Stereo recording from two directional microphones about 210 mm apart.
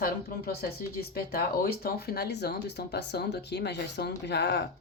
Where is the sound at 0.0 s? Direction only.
45° left (ahead or behind).